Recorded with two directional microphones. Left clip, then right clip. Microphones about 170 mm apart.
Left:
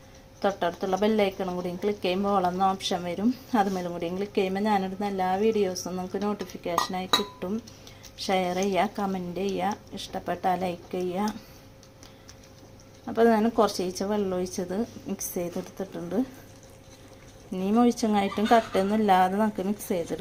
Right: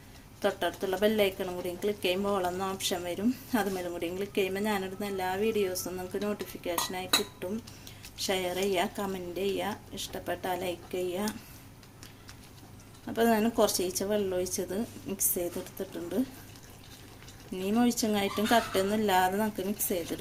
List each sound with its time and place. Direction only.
0.4 s a woman's voice: 25° left (ahead or behind)
13.1 s a woman's voice: 25° left (ahead or behind)
17.5 s a woman's voice: 25° left (ahead or behind)